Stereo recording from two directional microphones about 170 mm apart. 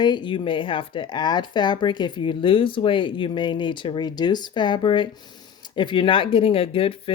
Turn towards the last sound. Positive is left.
turn(degrees=35)  # may be behind; listen again after turning